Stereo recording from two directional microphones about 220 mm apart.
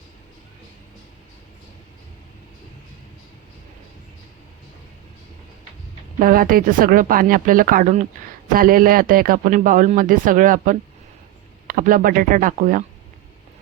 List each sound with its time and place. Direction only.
6.1 s speech: 40° right (ahead or behind)